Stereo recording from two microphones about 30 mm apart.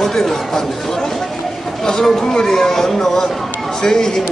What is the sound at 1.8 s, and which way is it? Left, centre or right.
Speech, centre.